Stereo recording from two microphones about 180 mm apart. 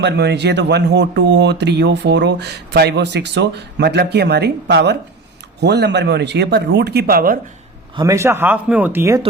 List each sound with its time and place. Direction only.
0.0 s speech: 70° right (ahead or behind)
7.9 s speech: 15° right (ahead or behind)